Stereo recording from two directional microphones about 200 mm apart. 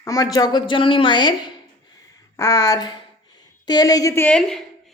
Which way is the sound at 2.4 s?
15° left (ahead or behind).